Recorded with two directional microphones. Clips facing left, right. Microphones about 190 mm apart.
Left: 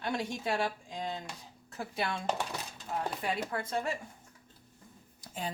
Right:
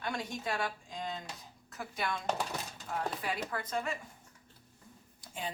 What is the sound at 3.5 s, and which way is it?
Speech, 30° left (ahead or behind).